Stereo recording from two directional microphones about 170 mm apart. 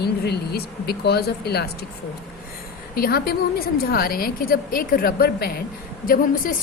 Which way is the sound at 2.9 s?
65° left (ahead or behind).